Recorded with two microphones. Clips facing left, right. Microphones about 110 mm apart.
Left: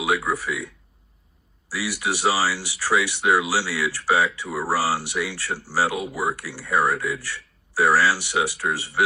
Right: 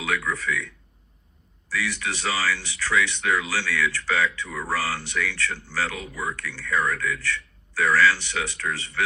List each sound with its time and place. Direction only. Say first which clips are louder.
0.0 s speech: left 4 dB; 15° left (ahead or behind)
1.7 s speech: left 2 dB; 15° left (ahead or behind)